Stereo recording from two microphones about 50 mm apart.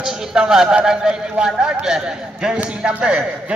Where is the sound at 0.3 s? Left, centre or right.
Centre.